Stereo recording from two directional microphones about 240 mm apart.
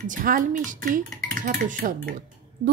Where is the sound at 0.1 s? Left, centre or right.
Right.